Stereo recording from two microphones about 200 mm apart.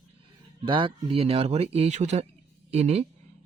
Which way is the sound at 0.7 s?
25° right (ahead or behind).